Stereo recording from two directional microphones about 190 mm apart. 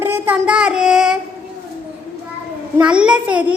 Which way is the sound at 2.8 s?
5° right (ahead or behind).